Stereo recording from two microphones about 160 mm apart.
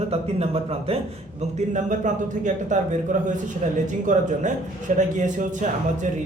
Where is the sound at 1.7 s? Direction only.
50° right (ahead or behind).